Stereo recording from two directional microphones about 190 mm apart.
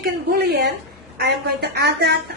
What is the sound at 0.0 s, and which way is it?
Speech, 55° right (ahead or behind).